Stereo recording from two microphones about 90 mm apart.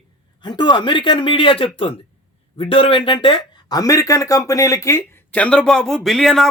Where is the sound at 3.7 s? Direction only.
40° left (ahead or behind).